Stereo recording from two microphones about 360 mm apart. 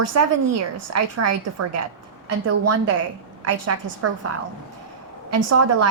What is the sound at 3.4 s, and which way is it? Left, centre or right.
Speech, right.